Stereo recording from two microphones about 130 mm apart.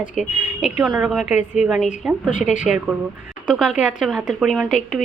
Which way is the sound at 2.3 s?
75° left (ahead or behind).